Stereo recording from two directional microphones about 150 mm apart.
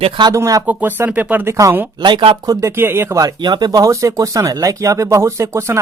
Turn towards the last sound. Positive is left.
turn(degrees=-20)  # may be behind; listen again after turning